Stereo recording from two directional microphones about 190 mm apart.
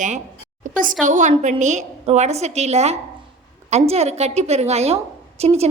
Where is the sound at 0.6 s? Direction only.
45° right (ahead or behind).